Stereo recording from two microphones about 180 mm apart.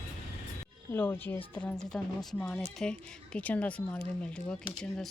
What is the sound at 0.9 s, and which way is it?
A woman's voice, 10° left (ahead or behind).